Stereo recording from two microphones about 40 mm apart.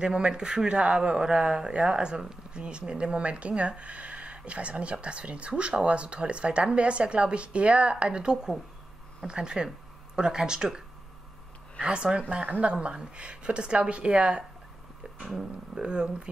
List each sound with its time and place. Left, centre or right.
0.0 s speech: right
11.8 s speech: right
15.7 s speech: right